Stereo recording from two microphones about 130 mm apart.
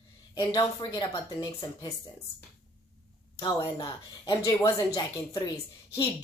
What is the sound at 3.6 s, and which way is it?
A woman's voice, 25° left (ahead or behind).